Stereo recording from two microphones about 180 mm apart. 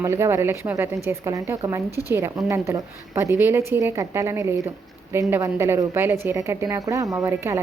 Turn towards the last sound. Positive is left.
turn(degrees=-15)  # may be behind; listen again after turning